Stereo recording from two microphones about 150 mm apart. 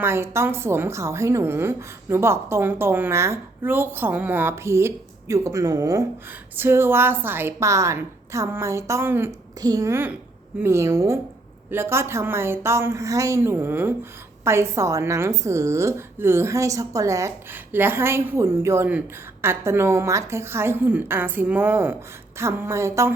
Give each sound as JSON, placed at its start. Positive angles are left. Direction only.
{"t": 0.0, "sound": "a woman's voice", "side_deg": -15}